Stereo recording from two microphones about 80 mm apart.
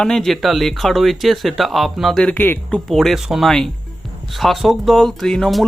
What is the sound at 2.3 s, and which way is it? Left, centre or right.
Speech, left.